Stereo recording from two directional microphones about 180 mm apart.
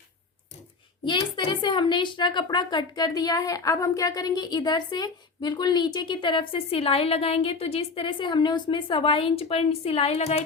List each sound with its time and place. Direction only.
1.0 s a woman's voice: 25° left (ahead or behind)